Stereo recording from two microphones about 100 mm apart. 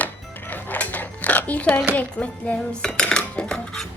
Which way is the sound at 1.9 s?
15° left (ahead or behind).